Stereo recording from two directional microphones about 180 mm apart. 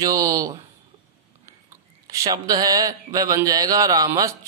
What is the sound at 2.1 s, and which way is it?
Speech, 20° right (ahead or behind).